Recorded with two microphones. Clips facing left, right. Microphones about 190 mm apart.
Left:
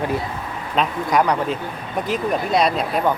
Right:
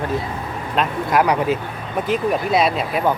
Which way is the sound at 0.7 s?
Centre (ahead or behind).